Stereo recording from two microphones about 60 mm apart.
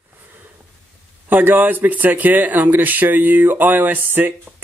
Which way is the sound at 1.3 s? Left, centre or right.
Right.